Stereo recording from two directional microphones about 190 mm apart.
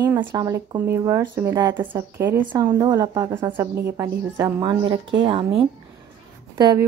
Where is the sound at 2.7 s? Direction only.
20° right (ahead or behind).